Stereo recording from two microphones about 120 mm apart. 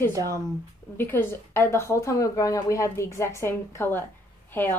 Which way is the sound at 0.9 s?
20° left (ahead or behind).